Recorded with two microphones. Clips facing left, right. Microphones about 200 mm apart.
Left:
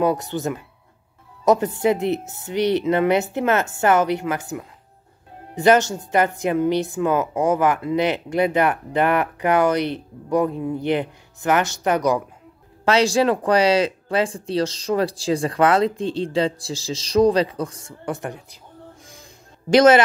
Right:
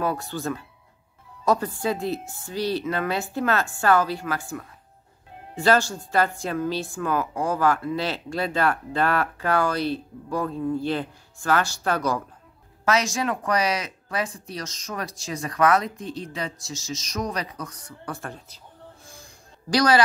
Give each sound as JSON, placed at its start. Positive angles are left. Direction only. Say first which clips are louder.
{"t": 0.0, "sound": "a woman's voice", "louder": "left 6 dB", "side_deg": 20}
{"t": 12.8, "sound": "a woman's voice", "louder": "left 7 dB", "side_deg": 30}
{"t": 19.7, "sound": "a woman's voice", "louder": "left 8 dB", "side_deg": 25}